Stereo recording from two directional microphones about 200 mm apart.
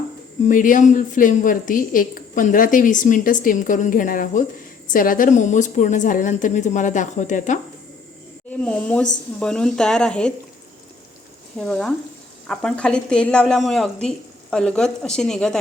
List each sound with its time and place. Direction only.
0.4 s a woman's voice: 40° left (ahead or behind)
8.6 s a woman's voice: 5° left (ahead or behind)
11.5 s a woman's voice: 5° left (ahead or behind)